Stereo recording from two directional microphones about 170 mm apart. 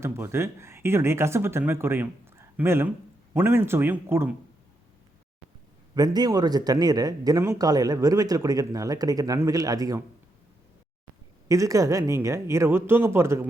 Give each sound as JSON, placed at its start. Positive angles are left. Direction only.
{"t": 0.0, "sound": "speech", "side_deg": -15}
{"t": 5.9, "sound": "speech", "side_deg": -25}
{"t": 11.4, "sound": "speech", "side_deg": -20}